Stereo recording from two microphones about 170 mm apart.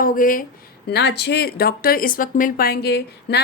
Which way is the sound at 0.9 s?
80° left.